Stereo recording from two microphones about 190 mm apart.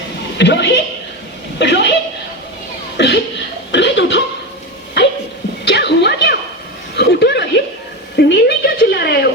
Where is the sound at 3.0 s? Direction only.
65° left (ahead or behind).